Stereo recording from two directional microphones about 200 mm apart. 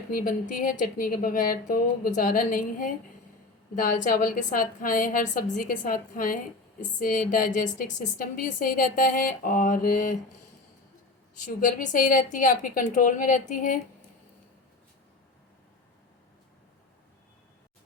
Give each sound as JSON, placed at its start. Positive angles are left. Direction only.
{"t": 0.1, "sound": "a woman's voice", "side_deg": 45}
{"t": 11.4, "sound": "a woman's voice", "side_deg": 40}